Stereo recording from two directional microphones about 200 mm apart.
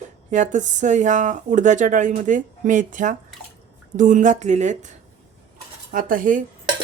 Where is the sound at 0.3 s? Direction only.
35° right (ahead or behind).